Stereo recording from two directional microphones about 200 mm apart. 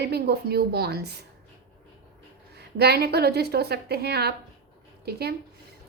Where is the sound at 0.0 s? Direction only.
55° right (ahead or behind).